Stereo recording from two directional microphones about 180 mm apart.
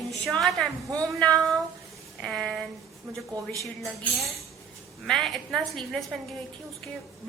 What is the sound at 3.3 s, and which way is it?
Speech, 20° right (ahead or behind).